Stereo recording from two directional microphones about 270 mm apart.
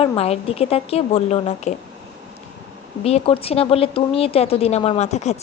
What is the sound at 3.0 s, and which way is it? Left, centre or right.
A woman's voice, left.